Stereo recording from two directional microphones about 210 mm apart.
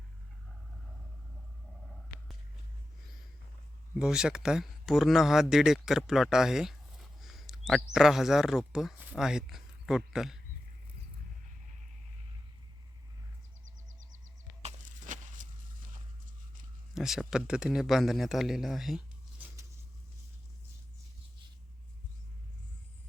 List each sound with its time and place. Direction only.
3.9 s speech: 5° right (ahead or behind)
14.6 s a sound: 35° right (ahead or behind)
16.9 s speech: centre (ahead or behind)